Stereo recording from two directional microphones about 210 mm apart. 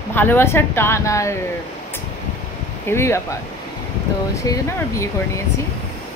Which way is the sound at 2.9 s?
10° left (ahead or behind).